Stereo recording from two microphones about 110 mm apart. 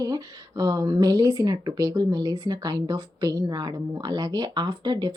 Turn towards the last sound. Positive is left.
turn(degrees=-40)  # may be behind; listen again after turning